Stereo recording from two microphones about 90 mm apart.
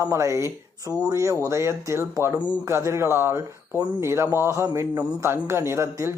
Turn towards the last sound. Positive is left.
turn(degrees=-30)  # may be behind; listen again after turning